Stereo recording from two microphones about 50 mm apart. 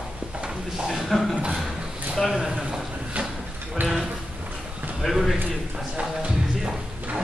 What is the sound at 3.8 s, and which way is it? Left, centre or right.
Music, centre.